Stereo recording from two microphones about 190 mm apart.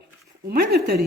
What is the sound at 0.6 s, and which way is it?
Speech, 55° right (ahead or behind).